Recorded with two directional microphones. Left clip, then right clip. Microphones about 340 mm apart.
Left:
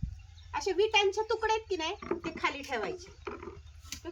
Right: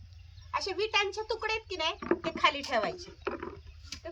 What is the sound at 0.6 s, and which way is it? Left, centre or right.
A woman's voice, centre.